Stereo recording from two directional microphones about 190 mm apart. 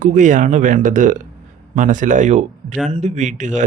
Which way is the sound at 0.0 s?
40° right (ahead or behind).